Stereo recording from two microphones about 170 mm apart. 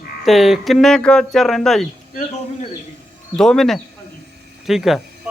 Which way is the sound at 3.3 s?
5° left (ahead or behind).